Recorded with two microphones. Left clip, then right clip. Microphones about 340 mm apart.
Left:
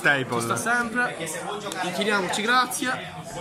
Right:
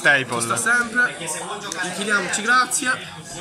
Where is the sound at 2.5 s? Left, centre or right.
Centre.